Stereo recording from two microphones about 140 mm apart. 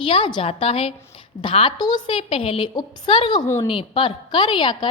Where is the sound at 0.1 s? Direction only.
35° left (ahead or behind).